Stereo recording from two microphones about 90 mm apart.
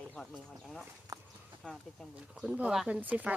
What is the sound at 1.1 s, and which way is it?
Clip-clop, 40° right (ahead or behind).